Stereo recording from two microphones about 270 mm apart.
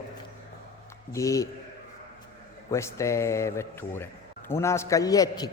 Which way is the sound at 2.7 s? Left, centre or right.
Centre.